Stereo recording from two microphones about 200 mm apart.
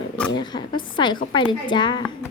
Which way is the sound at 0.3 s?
20° left (ahead or behind).